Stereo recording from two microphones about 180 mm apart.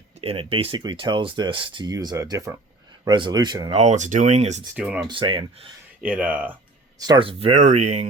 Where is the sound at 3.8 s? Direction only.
40° right (ahead or behind).